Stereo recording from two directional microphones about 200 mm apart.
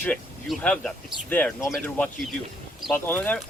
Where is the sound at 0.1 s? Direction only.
Centre (ahead or behind).